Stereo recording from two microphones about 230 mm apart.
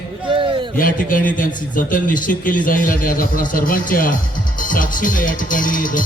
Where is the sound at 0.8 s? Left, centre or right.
Left.